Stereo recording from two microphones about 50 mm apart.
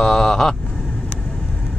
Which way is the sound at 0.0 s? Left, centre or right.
Centre.